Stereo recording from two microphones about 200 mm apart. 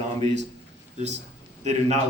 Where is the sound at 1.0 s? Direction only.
35° right (ahead or behind).